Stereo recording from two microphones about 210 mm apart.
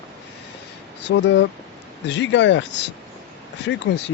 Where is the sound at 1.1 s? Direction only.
60° left (ahead or behind).